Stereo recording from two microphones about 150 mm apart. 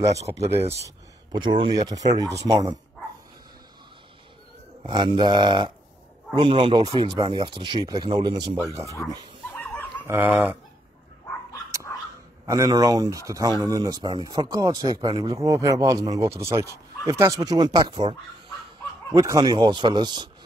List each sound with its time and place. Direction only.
0.0 s speech: 20° right (ahead or behind)
0.3 s speech: 40° right (ahead or behind)
0.7 s speech: 25° right (ahead or behind)
4.8 s speech: 30° right (ahead or behind)
8.8 s speech: 45° right (ahead or behind)
9.5 s dog: 10° left (ahead or behind)
10.0 s speech: 10° right (ahead or behind)
12.4 s speech: 20° right (ahead or behind)
19.1 s speech: 25° right (ahead or behind)